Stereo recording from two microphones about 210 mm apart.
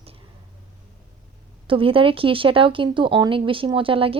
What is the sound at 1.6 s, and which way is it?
Speech, 25° right (ahead or behind).